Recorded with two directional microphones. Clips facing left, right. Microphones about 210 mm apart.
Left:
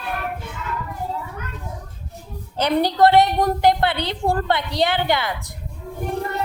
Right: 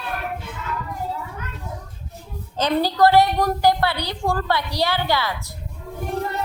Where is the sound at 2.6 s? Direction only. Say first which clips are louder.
Left 1 dB; 15° left (ahead or behind).